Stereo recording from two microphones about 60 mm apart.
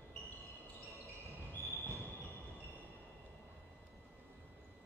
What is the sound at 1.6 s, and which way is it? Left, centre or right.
Train, right.